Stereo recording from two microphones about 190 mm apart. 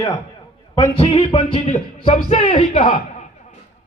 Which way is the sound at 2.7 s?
40° left (ahead or behind).